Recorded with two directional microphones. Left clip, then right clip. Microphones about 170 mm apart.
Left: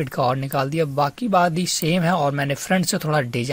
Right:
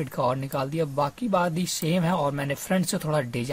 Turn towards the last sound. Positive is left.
turn(degrees=25)  # may be behind; listen again after turning